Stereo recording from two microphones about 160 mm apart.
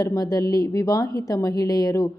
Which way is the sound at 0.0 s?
20° left (ahead or behind).